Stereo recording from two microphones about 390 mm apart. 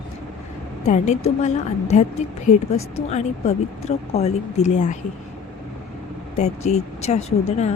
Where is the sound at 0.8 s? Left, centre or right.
Centre.